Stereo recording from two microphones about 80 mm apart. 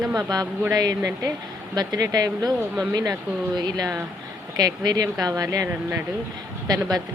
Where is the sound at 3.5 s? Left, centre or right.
Right.